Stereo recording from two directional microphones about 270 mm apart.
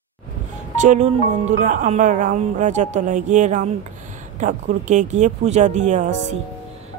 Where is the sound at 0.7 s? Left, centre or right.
Right.